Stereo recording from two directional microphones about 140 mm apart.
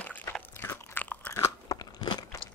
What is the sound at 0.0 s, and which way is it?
Crunch, 15° left (ahead or behind).